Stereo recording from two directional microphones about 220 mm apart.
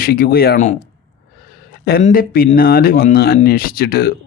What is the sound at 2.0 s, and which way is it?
Speech, 40° left (ahead or behind).